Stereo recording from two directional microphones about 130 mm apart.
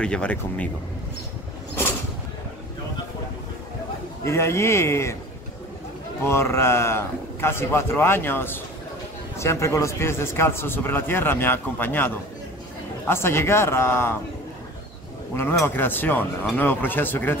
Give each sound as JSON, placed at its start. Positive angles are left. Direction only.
{"t": 0.0, "sound": "speech", "side_deg": 10}
{"t": 4.2, "sound": "speech", "side_deg": 20}
{"t": 6.2, "sound": "speech", "side_deg": 20}
{"t": 15.6, "sound": "speech", "side_deg": 15}